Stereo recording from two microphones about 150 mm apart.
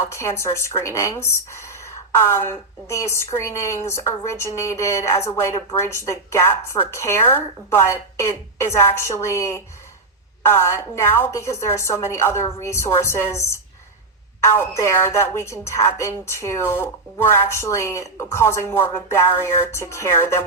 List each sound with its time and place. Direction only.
0.1 s speech: 20° left (ahead or behind)